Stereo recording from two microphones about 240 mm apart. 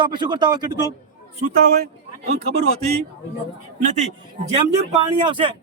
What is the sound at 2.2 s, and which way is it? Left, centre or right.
Speech, right.